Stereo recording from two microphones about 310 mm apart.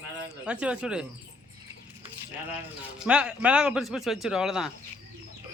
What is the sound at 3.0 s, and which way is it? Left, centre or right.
Speech, centre.